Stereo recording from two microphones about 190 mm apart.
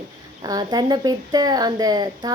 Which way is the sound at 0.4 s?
20° right (ahead or behind).